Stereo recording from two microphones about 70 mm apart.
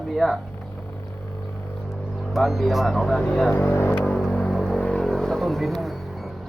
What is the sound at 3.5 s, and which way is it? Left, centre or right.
Speech, left.